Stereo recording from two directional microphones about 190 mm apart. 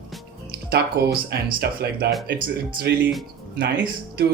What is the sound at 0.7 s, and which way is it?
A man's voice, 55° right (ahead or behind).